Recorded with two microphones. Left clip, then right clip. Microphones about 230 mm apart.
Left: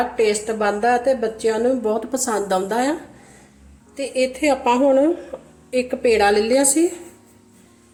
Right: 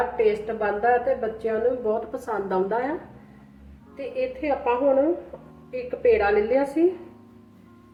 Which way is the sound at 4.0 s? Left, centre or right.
Left.